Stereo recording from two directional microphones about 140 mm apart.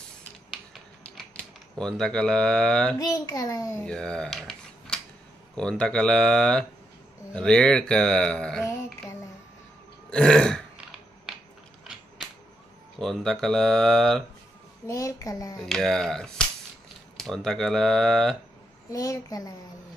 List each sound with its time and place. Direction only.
0.5 s typewriter: centre (ahead or behind)
3.0 s a child's voice: 25° left (ahead or behind)
3.8 s cutlery: 5° left (ahead or behind)
5.6 s speech: 5° left (ahead or behind)
10.0 s burping: 5° left (ahead or behind)
13.0 s speech: centre (ahead or behind)
14.9 s a child's voice: 25° left (ahead or behind)
15.6 s speech: 5° left (ahead or behind)
18.9 s a child's voice: 25° left (ahead or behind)